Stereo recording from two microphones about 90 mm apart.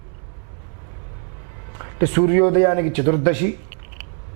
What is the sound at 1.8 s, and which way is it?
A man's voice, 15° right (ahead or behind).